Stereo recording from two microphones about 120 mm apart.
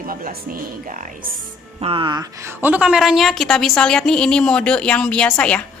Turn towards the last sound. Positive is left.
turn(degrees=5)  # may be behind; listen again after turning